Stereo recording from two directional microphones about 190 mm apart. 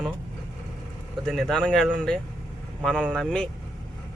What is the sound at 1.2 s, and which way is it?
A man's voice, 5° left (ahead or behind).